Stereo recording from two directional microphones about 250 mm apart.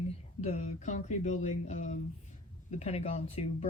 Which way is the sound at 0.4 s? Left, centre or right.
Left.